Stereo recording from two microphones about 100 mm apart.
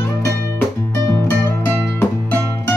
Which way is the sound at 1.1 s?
25° left (ahead or behind).